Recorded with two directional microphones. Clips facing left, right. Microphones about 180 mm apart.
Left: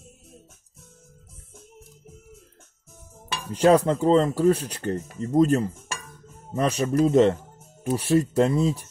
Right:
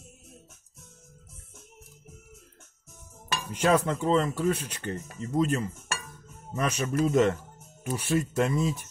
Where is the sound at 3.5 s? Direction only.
35° left (ahead or behind).